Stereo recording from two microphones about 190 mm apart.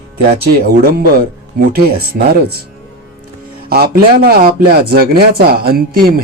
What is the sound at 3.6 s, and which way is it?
Speech, 50° right (ahead or behind).